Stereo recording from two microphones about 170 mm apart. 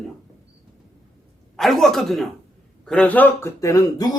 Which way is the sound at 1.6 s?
Centre (ahead or behind).